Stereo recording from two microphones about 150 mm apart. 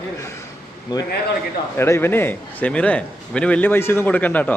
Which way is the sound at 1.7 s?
15° left (ahead or behind).